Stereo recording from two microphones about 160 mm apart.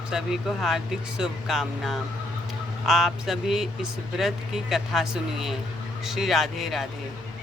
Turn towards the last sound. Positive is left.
turn(degrees=0)  # may be behind; listen again after turning